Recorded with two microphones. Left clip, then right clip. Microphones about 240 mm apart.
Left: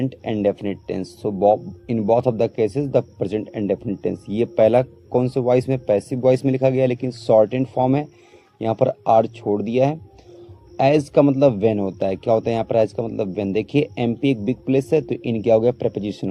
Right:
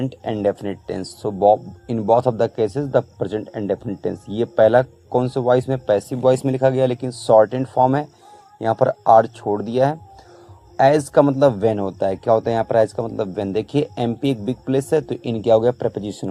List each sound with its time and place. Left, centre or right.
0.1 s speech: centre
3.3 s speech: right
4.0 s speech: centre